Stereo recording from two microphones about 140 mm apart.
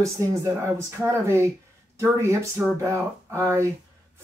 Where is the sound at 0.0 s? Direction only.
20° right (ahead or behind).